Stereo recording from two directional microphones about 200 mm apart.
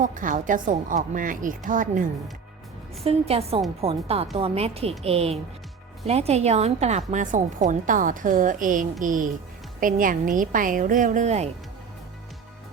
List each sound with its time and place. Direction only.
0.0 s a woman's voice: 40° right (ahead or behind)
3.0 s a woman's voice: 30° right (ahead or behind)